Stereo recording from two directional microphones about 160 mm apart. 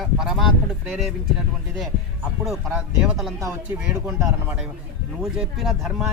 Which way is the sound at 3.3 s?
20° right (ahead or behind).